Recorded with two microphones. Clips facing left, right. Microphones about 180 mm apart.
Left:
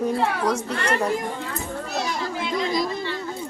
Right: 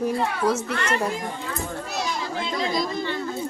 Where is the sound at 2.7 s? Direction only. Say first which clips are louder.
Left 1 dB; 10° left (ahead or behind).